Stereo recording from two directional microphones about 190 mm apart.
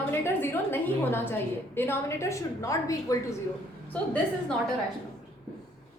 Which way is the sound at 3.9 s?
5° left (ahead or behind).